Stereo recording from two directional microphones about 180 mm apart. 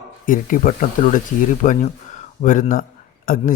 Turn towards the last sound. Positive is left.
turn(degrees=50)  # may be behind; listen again after turning